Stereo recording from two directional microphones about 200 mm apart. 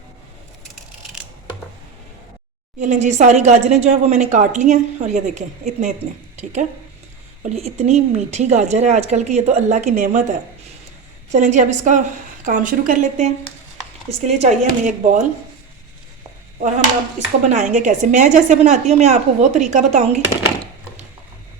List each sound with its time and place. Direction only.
2.7 s speech: 35° right (ahead or behind)
11.3 s speech: 35° right (ahead or behind)
17.2 s speech: 35° right (ahead or behind)